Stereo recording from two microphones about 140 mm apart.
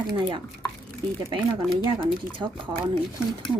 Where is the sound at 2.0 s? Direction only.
35° right (ahead or behind).